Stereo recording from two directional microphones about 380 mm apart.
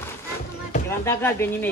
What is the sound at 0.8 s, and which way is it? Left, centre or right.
Speech, centre.